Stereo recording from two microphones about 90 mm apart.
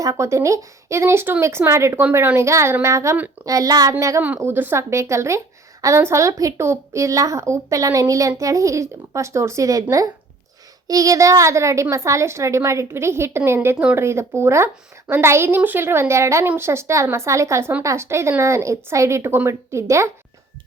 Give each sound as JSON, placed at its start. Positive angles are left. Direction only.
{"t": 0.0, "sound": "speech", "side_deg": -35}
{"t": 4.4, "sound": "speech", "side_deg": -25}
{"t": 10.8, "sound": "a woman's voice", "side_deg": -40}